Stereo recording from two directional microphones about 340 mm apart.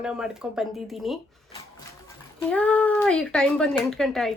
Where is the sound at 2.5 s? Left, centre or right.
Centre.